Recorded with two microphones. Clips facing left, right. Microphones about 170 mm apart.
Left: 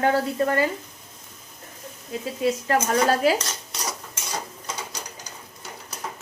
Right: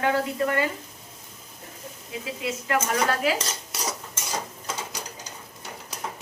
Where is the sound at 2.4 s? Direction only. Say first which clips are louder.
Left 5 dB; 40° left (ahead or behind).